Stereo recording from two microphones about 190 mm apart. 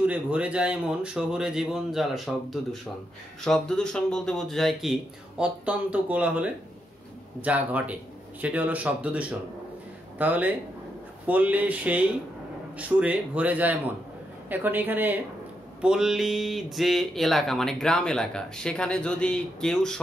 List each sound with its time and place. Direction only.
0.0 s a man's voice: 5° right (ahead or behind)